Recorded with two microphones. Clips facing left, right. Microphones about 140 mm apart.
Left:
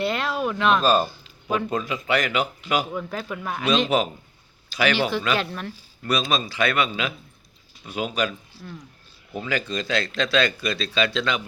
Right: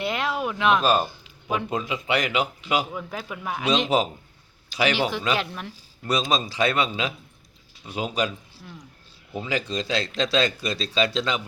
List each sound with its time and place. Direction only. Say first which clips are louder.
0.0 s speech: left 2 dB; 15° right (ahead or behind)
2.9 s a man's voice: left 3 dB; 5° right (ahead or behind)
6.1 s speech: even; 20° right (ahead or behind)
7.9 s speech: left 1 dB; 20° right (ahead or behind)
8.6 s a man's voice: left 7 dB; 10° right (ahead or behind)
9.3 s speech: even; 25° right (ahead or behind)